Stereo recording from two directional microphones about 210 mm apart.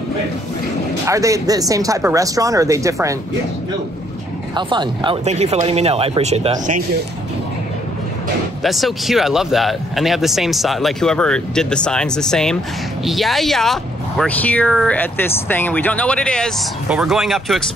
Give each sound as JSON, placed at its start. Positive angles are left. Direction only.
{"t": 1.0, "sound": "speech", "side_deg": -15}
{"t": 4.6, "sound": "speech", "side_deg": -20}
{"t": 8.6, "sound": "speech", "side_deg": 0}